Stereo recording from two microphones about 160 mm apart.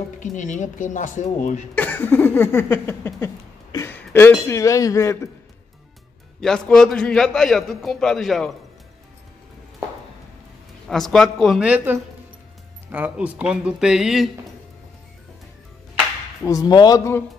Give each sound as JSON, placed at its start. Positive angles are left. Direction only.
{"t": 0.2, "sound": "speech", "side_deg": 50}
{"t": 1.8, "sound": "a sound", "side_deg": 10}
{"t": 3.7, "sound": "speech", "side_deg": 15}
{"t": 6.4, "sound": "a man's voice", "side_deg": 5}
{"t": 10.9, "sound": "a man's voice", "side_deg": 0}
{"t": 16.4, "sound": "speech", "side_deg": 25}